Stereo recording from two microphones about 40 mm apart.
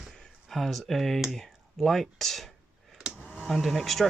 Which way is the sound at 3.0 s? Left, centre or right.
Centre.